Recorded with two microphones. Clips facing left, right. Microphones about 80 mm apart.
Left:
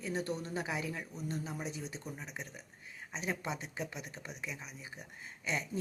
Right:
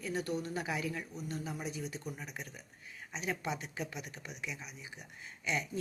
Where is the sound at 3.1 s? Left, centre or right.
Left.